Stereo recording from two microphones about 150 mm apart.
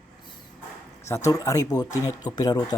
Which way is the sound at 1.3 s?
20° left (ahead or behind).